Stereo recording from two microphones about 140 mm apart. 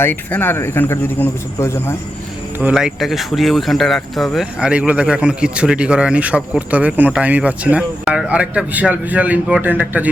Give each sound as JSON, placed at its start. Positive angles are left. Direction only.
{"t": 0.0, "sound": "speech", "side_deg": 15}
{"t": 2.6, "sound": "speech", "side_deg": -5}